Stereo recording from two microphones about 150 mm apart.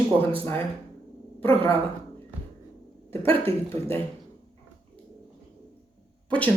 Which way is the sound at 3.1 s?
40° right (ahead or behind).